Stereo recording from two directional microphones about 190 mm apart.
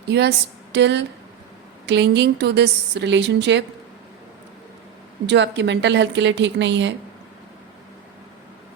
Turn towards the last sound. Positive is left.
turn(degrees=-70)  # may be behind; listen again after turning